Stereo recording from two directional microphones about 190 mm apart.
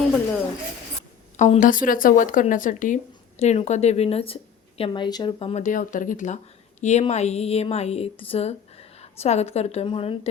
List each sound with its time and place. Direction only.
1.4 s speech: 40° left (ahead or behind)